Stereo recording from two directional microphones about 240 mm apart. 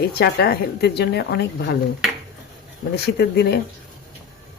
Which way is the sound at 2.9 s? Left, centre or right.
Left.